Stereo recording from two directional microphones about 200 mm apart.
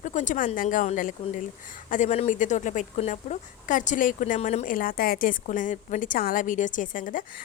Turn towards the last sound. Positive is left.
turn(degrees=40)  # may be behind; listen again after turning